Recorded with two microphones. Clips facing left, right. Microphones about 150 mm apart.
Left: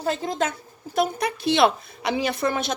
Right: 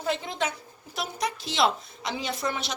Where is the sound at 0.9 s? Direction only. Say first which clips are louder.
Left 8 dB; 60° left (ahead or behind).